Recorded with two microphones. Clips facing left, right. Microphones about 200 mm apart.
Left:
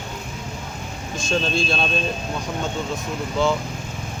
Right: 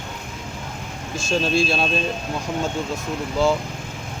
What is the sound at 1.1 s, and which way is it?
Speech, 5° right (ahead or behind).